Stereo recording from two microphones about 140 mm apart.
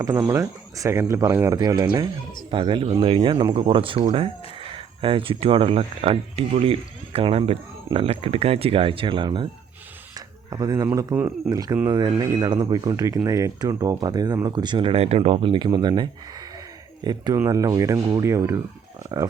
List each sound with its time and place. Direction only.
0.3 s speech: 20° right (ahead or behind)
10.2 s a sound: 25° right (ahead or behind)
11.1 s speech: 15° right (ahead or behind)
11.5 s speech: 25° right (ahead or behind)